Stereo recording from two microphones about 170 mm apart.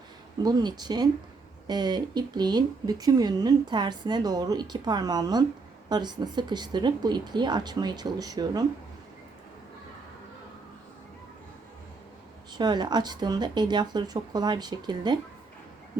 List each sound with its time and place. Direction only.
0.4 s speech: 25° right (ahead or behind)
12.5 s speech: 25° right (ahead or behind)